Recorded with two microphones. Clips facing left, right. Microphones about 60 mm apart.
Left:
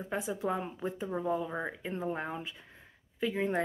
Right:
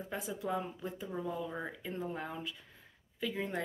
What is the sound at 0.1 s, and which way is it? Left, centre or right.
Speech, left.